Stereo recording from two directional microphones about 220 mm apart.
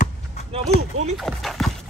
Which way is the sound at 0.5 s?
30° right (ahead or behind).